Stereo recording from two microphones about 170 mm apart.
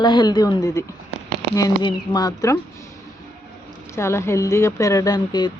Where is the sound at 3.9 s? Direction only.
15° left (ahead or behind).